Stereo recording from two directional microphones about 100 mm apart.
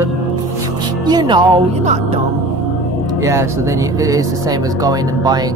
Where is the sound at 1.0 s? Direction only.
45° right (ahead or behind).